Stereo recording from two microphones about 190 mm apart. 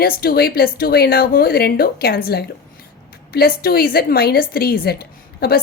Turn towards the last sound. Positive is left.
turn(degrees=55)  # may be behind; listen again after turning